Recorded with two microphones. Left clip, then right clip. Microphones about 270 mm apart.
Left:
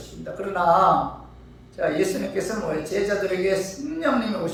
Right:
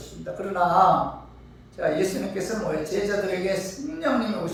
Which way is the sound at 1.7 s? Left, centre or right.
Centre.